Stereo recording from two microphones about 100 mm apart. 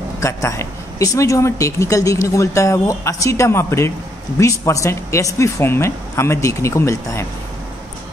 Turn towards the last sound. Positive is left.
turn(degrees=30)  # may be behind; listen again after turning